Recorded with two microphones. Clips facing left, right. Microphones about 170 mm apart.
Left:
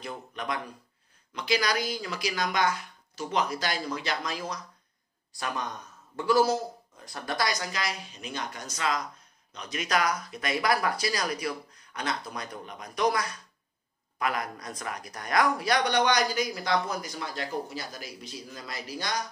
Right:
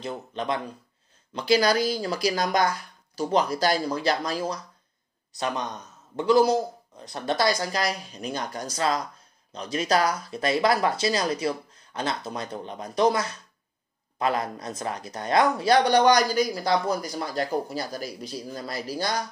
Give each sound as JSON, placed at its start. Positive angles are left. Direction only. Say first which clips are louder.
{"t": 0.0, "sound": "speech", "louder": "right 5 dB", "side_deg": -25}
{"t": 5.4, "sound": "speech", "louder": "right 4 dB", "side_deg": -20}